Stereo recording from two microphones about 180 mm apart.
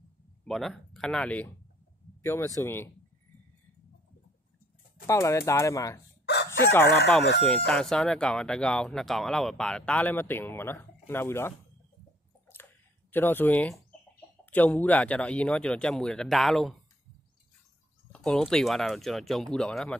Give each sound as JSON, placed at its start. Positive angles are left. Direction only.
{"t": 0.5, "sound": "speech", "side_deg": 0}
{"t": 5.0, "sound": "speech", "side_deg": 15}
{"t": 6.2, "sound": "crowing", "side_deg": 70}
{"t": 7.4, "sound": "speech", "side_deg": 5}
{"t": 13.1, "sound": "speech", "side_deg": 10}
{"t": 18.1, "sound": "speech", "side_deg": 5}